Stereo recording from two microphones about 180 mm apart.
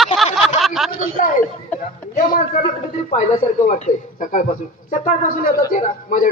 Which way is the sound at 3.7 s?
45° left (ahead or behind).